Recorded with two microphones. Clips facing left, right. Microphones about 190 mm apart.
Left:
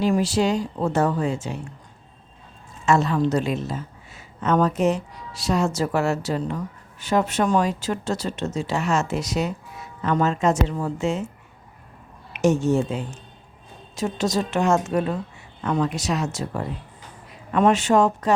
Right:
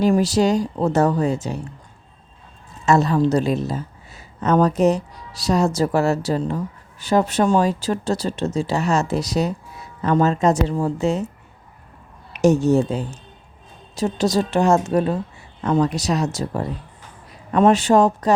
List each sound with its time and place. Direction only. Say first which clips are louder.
0.0 s speech: right 4 dB; 40° right (ahead or behind)
2.8 s a woman's voice: right 3 dB; 35° right (ahead or behind)
12.3 s speech: right 4 dB; 40° right (ahead or behind)